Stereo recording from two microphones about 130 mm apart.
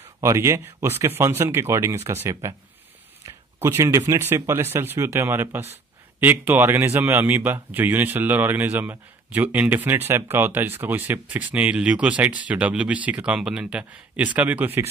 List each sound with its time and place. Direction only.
0.2 s speech: 20° right (ahead or behind)